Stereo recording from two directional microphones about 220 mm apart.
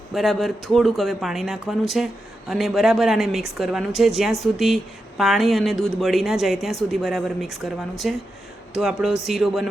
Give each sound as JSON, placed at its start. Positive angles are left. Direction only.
{"t": 0.1, "sound": "speech", "side_deg": 0}